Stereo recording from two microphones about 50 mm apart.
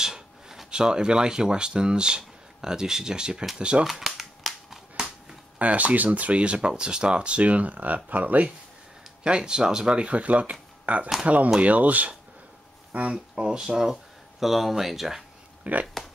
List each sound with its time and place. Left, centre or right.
0.0 s speech: centre
3.8 s cap gun: centre
5.0 s a sound: centre
5.6 s speech: right
9.2 s speech: centre
13.1 s speech: centre
15.6 s speech: right